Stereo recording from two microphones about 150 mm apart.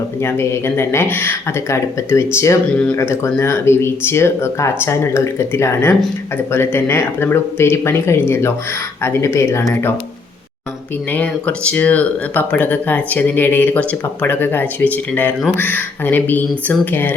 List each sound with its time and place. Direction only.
0.2 s speech: 15° left (ahead or behind)
11.1 s speech: 10° left (ahead or behind)